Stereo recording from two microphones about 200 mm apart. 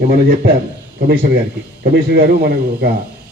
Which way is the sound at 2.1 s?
50° right (ahead or behind).